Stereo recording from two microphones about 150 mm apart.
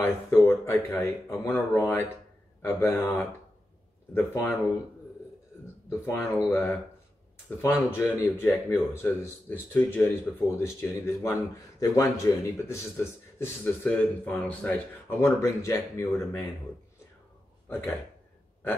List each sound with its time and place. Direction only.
0.0 s a man's voice: 15° left (ahead or behind)
5.9 s a man's voice: 15° left (ahead or behind)
17.6 s speech: 15° left (ahead or behind)